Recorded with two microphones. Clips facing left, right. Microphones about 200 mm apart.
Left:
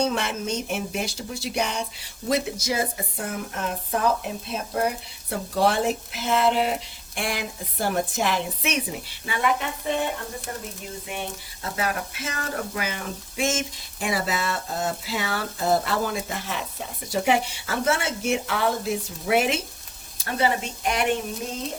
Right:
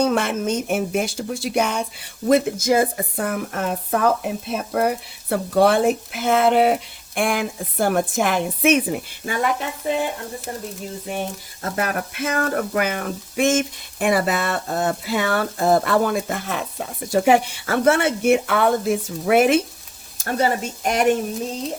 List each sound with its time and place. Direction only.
0.0 s speech: 55° right (ahead or behind)
5.3 s frying: 60° right (ahead or behind)
7.2 s speech: 55° right (ahead or behind)
11.0 s frying: 40° right (ahead or behind)
20.1 s speech: 45° right (ahead or behind)